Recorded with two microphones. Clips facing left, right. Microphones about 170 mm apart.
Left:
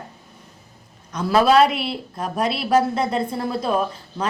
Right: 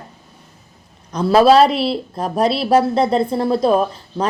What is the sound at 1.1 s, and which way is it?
A woman's voice, 30° right (ahead or behind).